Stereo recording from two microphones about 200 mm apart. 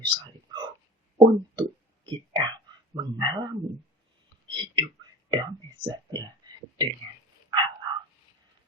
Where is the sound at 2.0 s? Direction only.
20° right (ahead or behind).